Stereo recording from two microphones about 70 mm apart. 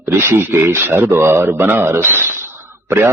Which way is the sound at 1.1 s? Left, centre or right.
Right.